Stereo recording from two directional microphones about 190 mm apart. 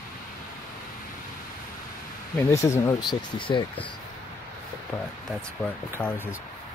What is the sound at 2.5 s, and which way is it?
Speech, 15° left (ahead or behind).